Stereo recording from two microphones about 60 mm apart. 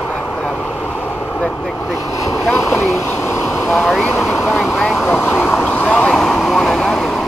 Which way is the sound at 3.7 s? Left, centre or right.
Centre.